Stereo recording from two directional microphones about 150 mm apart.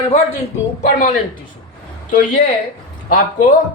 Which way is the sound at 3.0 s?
65° left (ahead or behind).